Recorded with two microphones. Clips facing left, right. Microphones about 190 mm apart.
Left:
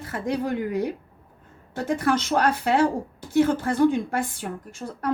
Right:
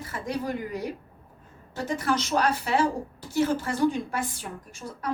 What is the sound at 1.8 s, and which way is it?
A woman's voice, 55° left (ahead or behind).